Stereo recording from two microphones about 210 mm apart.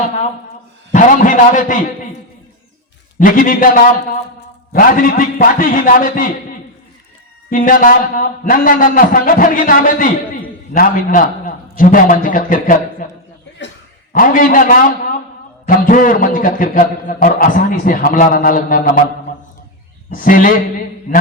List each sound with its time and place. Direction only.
0.9 s a man's voice: 35° left (ahead or behind)
3.2 s a man's voice: 40° left (ahead or behind)
7.5 s a man's voice: 40° left (ahead or behind)
14.1 s a man's voice: 40° left (ahead or behind)
20.1 s a man's voice: 40° left (ahead or behind)